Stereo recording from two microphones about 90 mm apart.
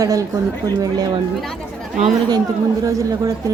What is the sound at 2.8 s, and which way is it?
Speech, 40° right (ahead or behind).